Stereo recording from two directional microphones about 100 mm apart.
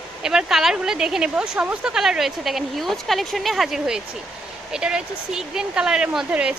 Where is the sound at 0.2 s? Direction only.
5° right (ahead or behind).